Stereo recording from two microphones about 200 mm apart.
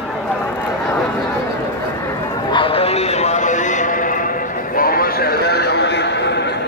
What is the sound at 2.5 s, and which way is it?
Horse, 25° left (ahead or behind).